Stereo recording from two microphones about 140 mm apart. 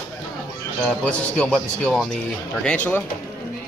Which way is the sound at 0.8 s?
5° left (ahead or behind).